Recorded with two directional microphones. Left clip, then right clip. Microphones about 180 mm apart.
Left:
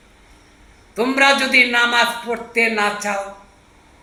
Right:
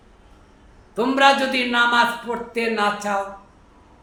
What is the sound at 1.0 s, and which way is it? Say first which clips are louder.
A man's voice: left 1 dB; 20° right (ahead or behind).